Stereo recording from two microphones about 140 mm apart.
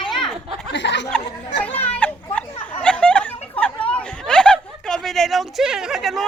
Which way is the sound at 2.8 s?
10° left (ahead or behind).